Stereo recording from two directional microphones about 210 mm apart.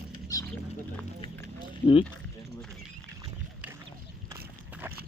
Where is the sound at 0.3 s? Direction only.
15° left (ahead or behind).